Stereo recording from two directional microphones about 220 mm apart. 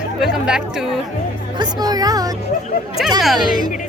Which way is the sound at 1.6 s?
20° right (ahead or behind).